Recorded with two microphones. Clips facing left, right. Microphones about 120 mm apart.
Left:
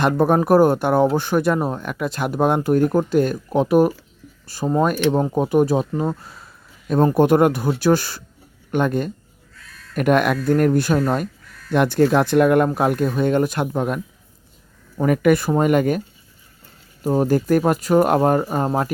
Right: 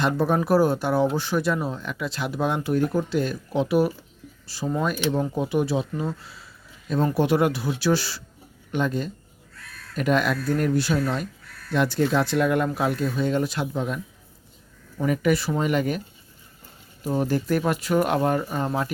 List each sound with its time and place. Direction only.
0.0 s speech: 55° left (ahead or behind)
17.0 s speech: 40° left (ahead or behind)